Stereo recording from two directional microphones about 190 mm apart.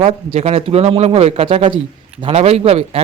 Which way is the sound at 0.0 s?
35° right (ahead or behind).